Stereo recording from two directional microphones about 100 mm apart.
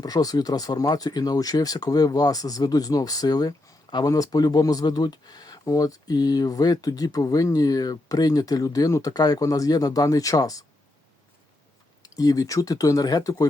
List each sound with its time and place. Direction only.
0.0 s speech: 40° left (ahead or behind)
12.0 s speech: 35° left (ahead or behind)